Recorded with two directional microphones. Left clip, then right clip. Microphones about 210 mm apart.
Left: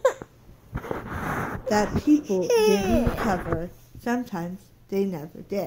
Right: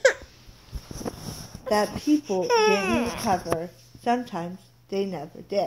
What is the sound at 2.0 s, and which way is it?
Speech, 20° left (ahead or behind).